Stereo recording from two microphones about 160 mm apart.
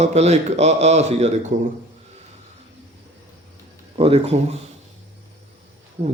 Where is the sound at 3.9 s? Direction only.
40° right (ahead or behind).